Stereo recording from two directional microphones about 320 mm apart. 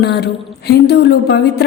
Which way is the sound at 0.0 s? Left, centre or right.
Left.